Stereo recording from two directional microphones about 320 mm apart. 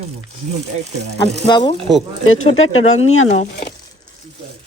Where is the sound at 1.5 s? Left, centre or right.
Centre.